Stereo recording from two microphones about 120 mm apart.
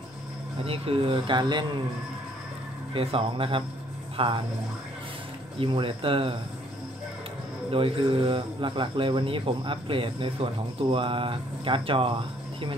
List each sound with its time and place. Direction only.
0.7 s speech: 50° right (ahead or behind)
2.9 s speech: 50° right (ahead or behind)
5.6 s speech: 45° right (ahead or behind)
7.7 s speech: 50° right (ahead or behind)